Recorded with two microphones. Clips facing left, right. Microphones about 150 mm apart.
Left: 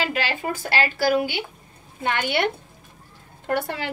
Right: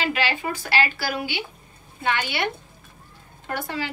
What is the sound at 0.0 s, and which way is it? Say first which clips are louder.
A woman's voice: even; 45° left (ahead or behind).